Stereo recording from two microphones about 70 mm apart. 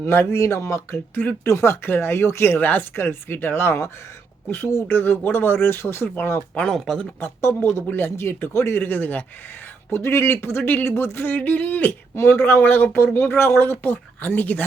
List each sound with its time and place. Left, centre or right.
0.0 s speech: left
4.9 s speech: left
6.5 s speech: centre
7.2 s speech: left
12.1 s speech: left